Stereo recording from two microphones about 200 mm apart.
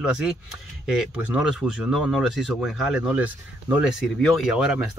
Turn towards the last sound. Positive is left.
turn(degrees=0)  # may be behind; listen again after turning